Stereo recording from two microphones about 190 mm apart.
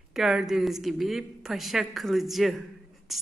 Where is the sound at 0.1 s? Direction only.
Centre (ahead or behind).